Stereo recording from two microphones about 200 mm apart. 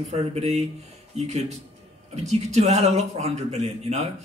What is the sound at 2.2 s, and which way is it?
Speech, 35° right (ahead or behind).